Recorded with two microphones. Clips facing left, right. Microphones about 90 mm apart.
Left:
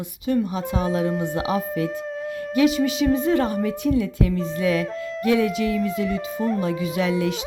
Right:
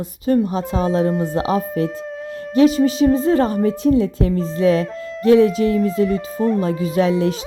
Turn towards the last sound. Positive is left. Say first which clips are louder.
# right 5 dB
turn(degrees=-35)  # may be behind; listen again after turning